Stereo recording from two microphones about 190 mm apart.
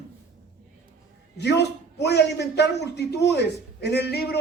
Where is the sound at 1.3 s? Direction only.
60° left (ahead or behind).